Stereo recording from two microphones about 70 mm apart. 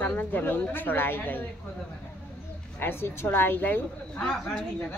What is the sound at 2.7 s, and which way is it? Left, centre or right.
Speech, left.